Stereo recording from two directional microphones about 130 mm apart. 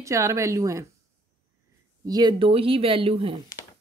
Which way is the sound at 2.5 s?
45° right (ahead or behind).